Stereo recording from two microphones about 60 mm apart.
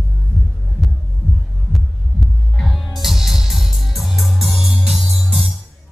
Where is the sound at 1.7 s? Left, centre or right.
Centre.